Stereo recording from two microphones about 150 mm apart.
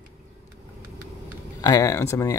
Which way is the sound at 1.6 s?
20° left (ahead or behind).